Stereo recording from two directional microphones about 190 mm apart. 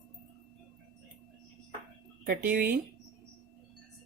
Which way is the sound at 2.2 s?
50° right (ahead or behind).